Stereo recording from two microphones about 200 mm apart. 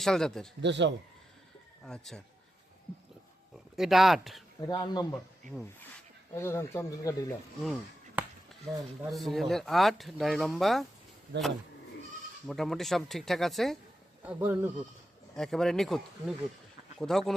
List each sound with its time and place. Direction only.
0.0 s speech: 5° left (ahead or behind)
0.6 s speech: 60° right (ahead or behind)
1.8 s speech: 5° left (ahead or behind)
3.8 s speech: centre (ahead or behind)
4.6 s speech: 20° left (ahead or behind)
6.3 s speech: 15° left (ahead or behind)
7.6 s speech: centre (ahead or behind)
11.3 s speech: 60° right (ahead or behind)
12.5 s speech: centre (ahead or behind)
14.2 s speech: 10° right (ahead or behind)
15.4 s speech: centre (ahead or behind)